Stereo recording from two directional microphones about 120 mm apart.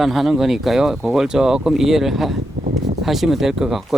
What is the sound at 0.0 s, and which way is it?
Speech, centre (ahead or behind).